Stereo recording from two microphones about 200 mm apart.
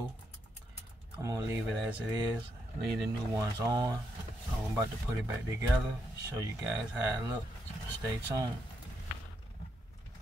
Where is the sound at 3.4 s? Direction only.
20° right (ahead or behind).